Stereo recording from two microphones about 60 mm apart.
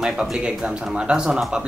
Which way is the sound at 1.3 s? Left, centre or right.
Centre.